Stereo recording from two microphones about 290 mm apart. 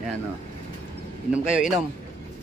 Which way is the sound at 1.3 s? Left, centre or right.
Centre.